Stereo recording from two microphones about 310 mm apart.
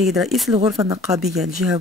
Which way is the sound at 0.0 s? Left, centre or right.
Centre.